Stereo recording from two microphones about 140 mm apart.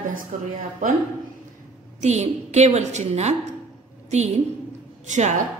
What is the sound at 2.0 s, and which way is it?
A woman's voice, 55° right (ahead or behind).